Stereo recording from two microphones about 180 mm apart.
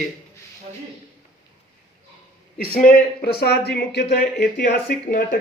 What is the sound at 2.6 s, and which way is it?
Speech, 55° left (ahead or behind).